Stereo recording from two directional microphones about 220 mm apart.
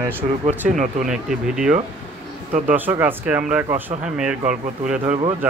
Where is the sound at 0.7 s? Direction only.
35° right (ahead or behind).